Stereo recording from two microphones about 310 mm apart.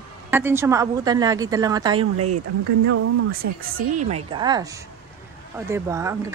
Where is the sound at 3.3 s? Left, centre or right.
Right.